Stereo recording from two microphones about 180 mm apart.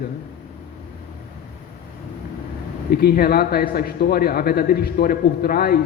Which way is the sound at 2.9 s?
60° left (ahead or behind).